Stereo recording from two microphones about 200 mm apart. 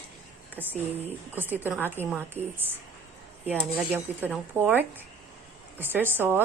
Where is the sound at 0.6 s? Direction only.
10° right (ahead or behind).